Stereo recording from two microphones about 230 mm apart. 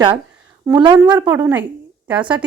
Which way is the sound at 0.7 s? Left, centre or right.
Centre.